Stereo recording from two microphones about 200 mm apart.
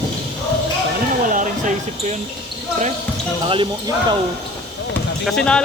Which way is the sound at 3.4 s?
25° right (ahead or behind).